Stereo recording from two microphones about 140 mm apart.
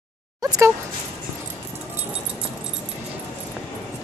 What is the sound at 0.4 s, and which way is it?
Speech, 25° right (ahead or behind).